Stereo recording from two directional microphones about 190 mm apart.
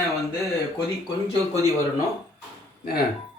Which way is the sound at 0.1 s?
Centre (ahead or behind).